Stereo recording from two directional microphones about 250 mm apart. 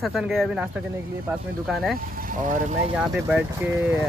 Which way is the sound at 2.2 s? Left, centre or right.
Right.